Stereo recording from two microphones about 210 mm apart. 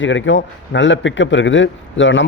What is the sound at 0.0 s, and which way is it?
A man's voice, 65° left (ahead or behind).